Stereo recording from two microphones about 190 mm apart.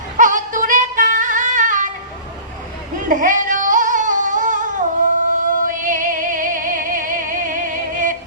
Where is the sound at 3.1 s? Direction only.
45° right (ahead or behind).